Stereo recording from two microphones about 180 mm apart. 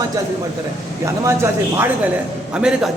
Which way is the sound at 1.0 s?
15° right (ahead or behind).